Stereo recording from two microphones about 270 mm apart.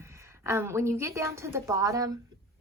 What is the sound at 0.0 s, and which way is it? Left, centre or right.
A woman's voice, centre.